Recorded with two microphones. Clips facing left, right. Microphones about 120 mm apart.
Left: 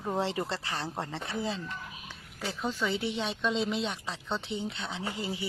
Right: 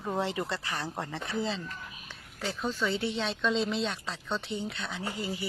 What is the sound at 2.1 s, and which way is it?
A woman's voice, 15° left (ahead or behind).